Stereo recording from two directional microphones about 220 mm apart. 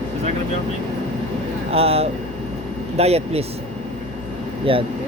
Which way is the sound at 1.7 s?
25° right (ahead or behind).